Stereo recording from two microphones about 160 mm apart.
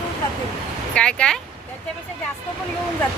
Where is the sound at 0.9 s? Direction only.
5° left (ahead or behind).